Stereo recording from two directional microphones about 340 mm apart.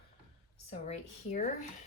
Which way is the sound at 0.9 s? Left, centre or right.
Left.